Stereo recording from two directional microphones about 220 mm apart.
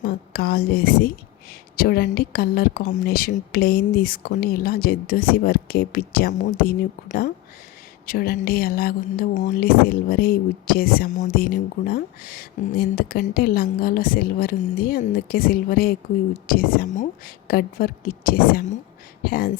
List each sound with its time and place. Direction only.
0.0 s speech: 45° left (ahead or behind)